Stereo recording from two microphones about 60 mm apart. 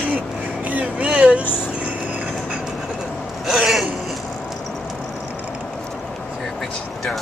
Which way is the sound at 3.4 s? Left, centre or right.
Centre.